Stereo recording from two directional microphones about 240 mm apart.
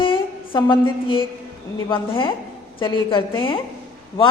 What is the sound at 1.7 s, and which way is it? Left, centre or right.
A woman's voice, left.